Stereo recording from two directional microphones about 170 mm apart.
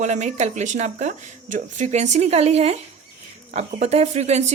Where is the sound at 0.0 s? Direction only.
45° right (ahead or behind).